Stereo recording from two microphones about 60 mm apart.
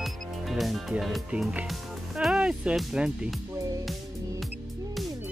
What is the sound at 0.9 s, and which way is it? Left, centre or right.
Speech, centre.